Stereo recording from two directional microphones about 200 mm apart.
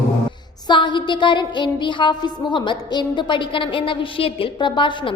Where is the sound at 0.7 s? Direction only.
25° left (ahead or behind).